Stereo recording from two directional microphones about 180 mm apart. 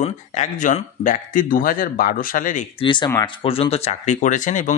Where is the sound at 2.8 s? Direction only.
25° left (ahead or behind); by 4.7 s 45° left (ahead or behind).